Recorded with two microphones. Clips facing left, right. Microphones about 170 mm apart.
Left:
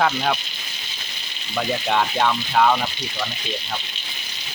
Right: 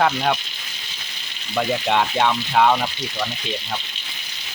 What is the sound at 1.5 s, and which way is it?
Speech, 5° right (ahead or behind).